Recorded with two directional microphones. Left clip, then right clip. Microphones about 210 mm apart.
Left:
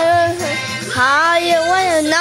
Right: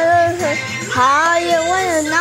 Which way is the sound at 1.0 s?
5° left (ahead or behind).